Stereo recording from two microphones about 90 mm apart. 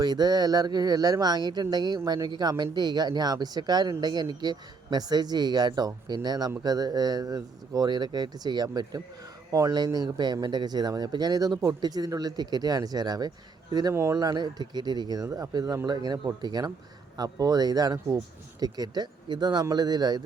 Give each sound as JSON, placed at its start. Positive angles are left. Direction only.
{"t": 0.0, "sound": "speech", "side_deg": -50}
{"t": 13.9, "sound": "speech", "side_deg": -30}
{"t": 14.2, "sound": "speech", "side_deg": -50}
{"t": 15.9, "sound": "speech", "side_deg": -55}